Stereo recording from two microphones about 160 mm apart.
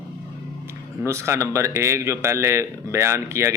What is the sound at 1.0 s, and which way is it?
A man's voice, 15° right (ahead or behind).